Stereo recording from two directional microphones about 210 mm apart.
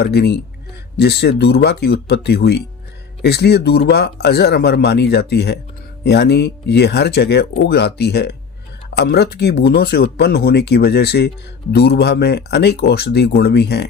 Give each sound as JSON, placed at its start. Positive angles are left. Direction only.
{"t": 0.0, "sound": "speech", "side_deg": 50}